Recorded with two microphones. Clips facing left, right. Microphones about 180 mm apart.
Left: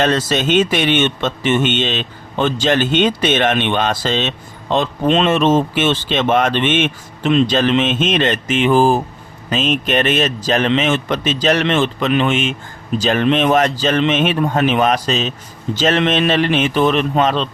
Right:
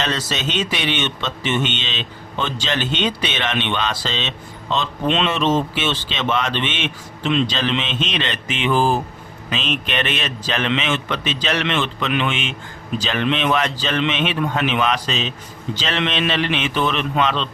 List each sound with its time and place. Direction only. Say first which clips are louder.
0.0 s a man's voice: left 8 dB; 50° left (ahead or behind)